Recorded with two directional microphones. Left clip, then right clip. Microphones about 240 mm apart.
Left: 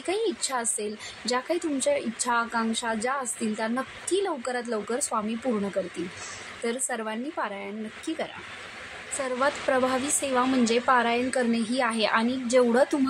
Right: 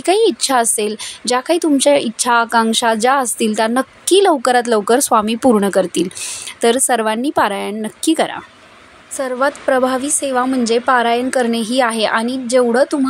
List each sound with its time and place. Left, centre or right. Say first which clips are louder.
0.0 s a woman's voice: right 14 dB; right
9.2 s a woman's voice: right 9 dB; right